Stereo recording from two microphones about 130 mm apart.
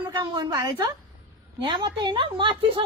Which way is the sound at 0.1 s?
30° right (ahead or behind).